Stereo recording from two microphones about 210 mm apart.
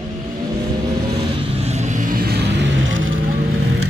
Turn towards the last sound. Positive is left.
turn(degrees=-60)  # may be behind; listen again after turning